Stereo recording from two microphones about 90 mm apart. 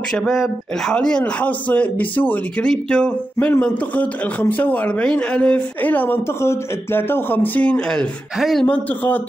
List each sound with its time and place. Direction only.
0.1 s a man's voice: 5° left (ahead or behind)
8.4 s speech: centre (ahead or behind)
8.6 s a man's voice: 15° left (ahead or behind)